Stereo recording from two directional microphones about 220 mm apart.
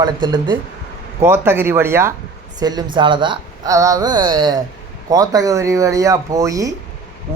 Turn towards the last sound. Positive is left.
turn(degrees=-15)  # may be behind; listen again after turning